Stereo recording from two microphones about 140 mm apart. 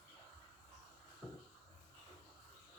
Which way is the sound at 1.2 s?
10° left (ahead or behind).